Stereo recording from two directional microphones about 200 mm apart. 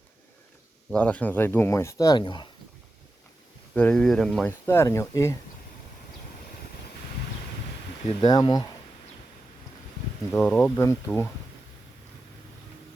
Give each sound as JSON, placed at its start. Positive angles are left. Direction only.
{"t": 0.9, "sound": "speech", "side_deg": 5}
{"t": 3.8, "sound": "speech", "side_deg": 5}
{"t": 8.0, "sound": "speech", "side_deg": 25}
{"t": 10.3, "sound": "speech", "side_deg": 5}